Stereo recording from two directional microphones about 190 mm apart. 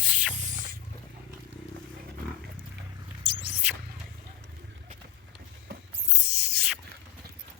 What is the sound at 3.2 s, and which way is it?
Rodents, 65° left (ahead or behind).